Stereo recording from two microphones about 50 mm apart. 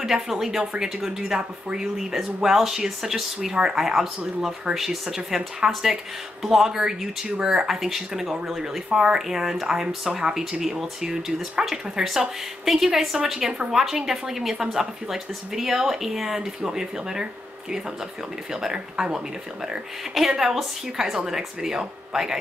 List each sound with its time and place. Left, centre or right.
0.0 s speech: centre
3.3 s speech: centre
3.7 s a woman's voice: centre